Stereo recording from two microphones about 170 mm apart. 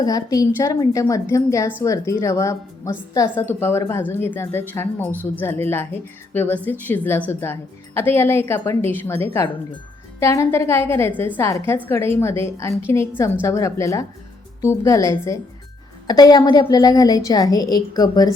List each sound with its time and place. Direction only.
0.0 s a woman's voice: 20° left (ahead or behind)
5.1 s a woman's voice: 10° right (ahead or behind)
5.4 s a woman's voice: 15° left (ahead or behind)